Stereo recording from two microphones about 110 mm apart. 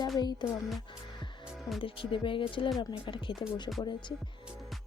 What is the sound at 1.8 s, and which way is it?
Speech, 50° left (ahead or behind).